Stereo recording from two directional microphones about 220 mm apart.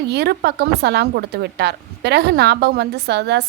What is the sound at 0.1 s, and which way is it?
Speech, 50° right (ahead or behind).